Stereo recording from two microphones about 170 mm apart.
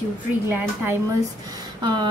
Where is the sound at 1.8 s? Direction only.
30° right (ahead or behind).